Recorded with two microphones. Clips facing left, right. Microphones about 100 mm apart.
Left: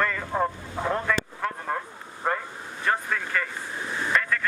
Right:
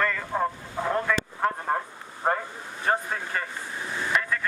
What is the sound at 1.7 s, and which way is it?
Vehicle, 40° right (ahead or behind).